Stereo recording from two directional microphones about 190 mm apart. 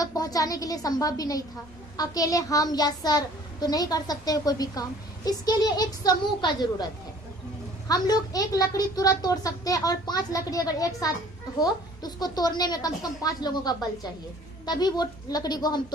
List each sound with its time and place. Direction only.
0.0 s a child's voice: 20° left (ahead or behind)
7.9 s a child's voice: 20° left (ahead or behind)